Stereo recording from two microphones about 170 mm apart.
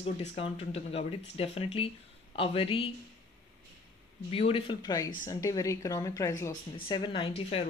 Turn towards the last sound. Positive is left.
turn(degrees=30)  # may be behind; listen again after turning